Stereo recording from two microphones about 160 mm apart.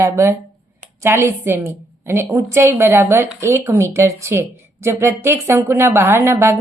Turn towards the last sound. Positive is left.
turn(degrees=-15)  # may be behind; listen again after turning